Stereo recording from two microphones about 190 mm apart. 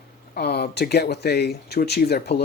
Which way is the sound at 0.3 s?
60° left (ahead or behind).